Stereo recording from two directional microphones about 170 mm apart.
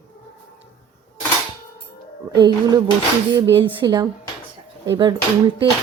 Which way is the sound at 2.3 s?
25° right (ahead or behind).